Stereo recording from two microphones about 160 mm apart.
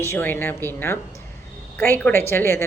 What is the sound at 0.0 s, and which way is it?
A woman's voice, 15° left (ahead or behind).